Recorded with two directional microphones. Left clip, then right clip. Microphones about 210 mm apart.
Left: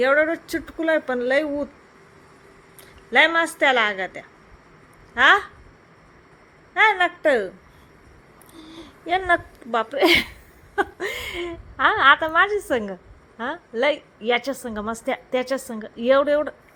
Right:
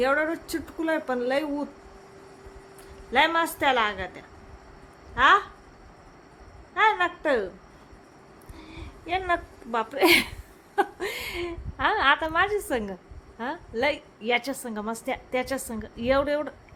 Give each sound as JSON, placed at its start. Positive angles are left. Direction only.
{"t": 0.0, "sound": "a woman's voice", "side_deg": 10}
{"t": 3.1, "sound": "a woman's voice", "side_deg": 10}
{"t": 6.7, "sound": "a woman's voice", "side_deg": 15}
{"t": 8.5, "sound": "a sound", "side_deg": 15}
{"t": 10.8, "sound": "a woman's voice", "side_deg": 5}